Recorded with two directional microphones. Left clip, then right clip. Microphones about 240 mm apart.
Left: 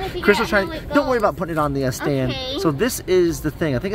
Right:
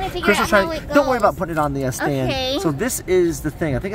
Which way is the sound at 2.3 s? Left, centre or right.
Right.